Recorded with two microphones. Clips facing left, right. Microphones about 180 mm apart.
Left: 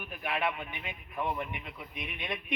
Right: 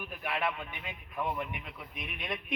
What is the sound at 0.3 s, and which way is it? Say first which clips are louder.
Speech: left 1 dB; 10° left (ahead or behind).